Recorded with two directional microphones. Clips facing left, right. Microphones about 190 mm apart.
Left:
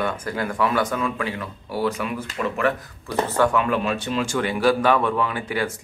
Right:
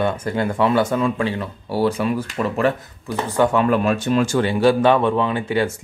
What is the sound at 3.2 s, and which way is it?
Speech, 15° right (ahead or behind).